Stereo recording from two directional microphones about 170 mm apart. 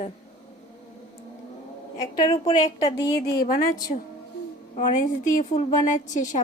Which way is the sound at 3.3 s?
55° left (ahead or behind).